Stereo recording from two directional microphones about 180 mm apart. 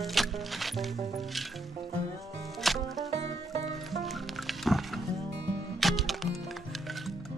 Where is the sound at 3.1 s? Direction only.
35° right (ahead or behind).